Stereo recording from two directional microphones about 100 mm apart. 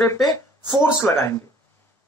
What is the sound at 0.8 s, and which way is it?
Speech, 30° left (ahead or behind).